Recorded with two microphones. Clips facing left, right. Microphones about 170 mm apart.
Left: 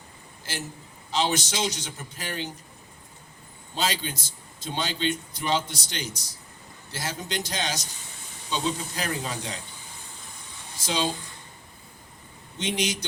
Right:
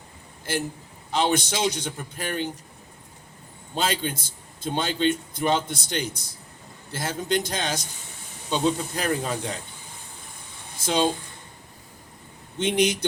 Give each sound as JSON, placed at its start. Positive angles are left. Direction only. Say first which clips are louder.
{"t": 0.5, "sound": "a man's voice", "louder": "right 8 dB", "side_deg": -55}
{"t": 3.8, "sound": "a man's voice", "louder": "right 3 dB", "side_deg": -55}
{"t": 10.8, "sound": "speech", "louder": "right 5 dB", "side_deg": -55}
{"t": 12.5, "sound": "a man's voice", "louder": "right 6 dB", "side_deg": -55}